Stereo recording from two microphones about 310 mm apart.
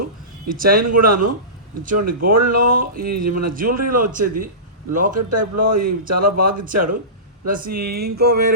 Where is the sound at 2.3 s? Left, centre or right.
Right.